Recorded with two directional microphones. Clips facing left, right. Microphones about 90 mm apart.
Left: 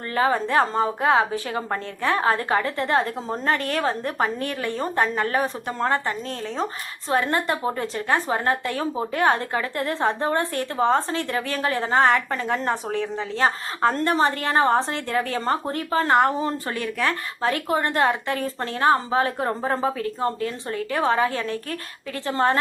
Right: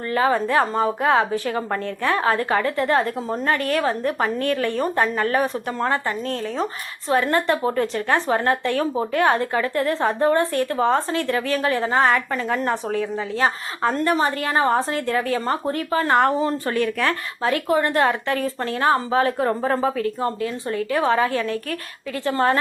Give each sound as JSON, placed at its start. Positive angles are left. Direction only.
{"t": 0.1, "sound": "a woman's voice", "side_deg": 30}
{"t": 11.7, "sound": "a woman's voice", "side_deg": 20}
{"t": 11.9, "sound": "a woman's voice", "side_deg": 35}
{"t": 16.1, "sound": "a woman's voice", "side_deg": 15}